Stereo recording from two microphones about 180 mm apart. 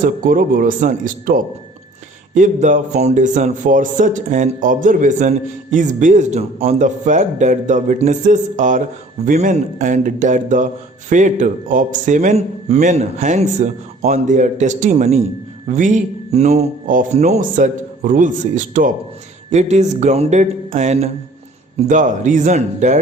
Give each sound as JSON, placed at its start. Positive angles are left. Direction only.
{"t": 0.0, "sound": "a man's voice", "side_deg": -50}